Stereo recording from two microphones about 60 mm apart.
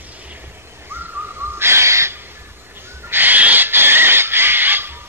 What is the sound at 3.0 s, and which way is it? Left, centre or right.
Owl, right.